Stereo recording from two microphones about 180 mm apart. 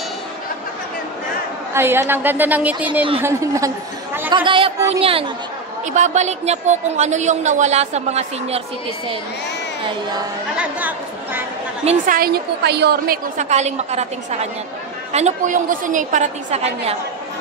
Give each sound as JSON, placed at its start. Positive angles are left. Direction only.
{"t": 1.7, "sound": "a woman's voice", "side_deg": -15}
{"t": 4.3, "sound": "speech", "side_deg": -25}
{"t": 10.6, "sound": "speech", "side_deg": -10}
{"t": 12.1, "sound": "a woman's voice", "side_deg": -55}